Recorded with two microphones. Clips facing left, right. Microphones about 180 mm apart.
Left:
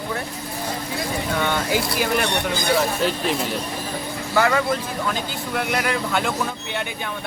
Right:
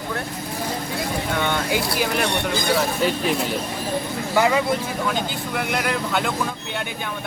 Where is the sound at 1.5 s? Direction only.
Centre (ahead or behind).